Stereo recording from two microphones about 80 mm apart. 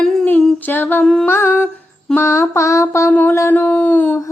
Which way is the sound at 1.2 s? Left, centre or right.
Left.